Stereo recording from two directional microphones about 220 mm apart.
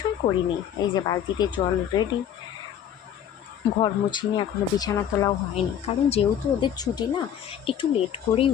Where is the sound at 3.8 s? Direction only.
20° left (ahead or behind).